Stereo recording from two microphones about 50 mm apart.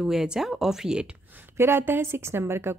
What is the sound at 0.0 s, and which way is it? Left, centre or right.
Speech, centre.